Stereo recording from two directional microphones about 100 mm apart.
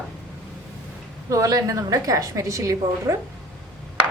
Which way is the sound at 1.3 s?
35° right (ahead or behind).